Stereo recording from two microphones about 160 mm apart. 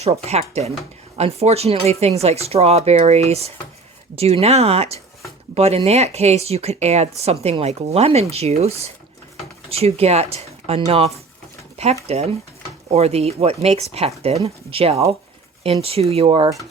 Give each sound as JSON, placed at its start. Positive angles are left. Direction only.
{"t": 0.0, "sound": "speech", "side_deg": -40}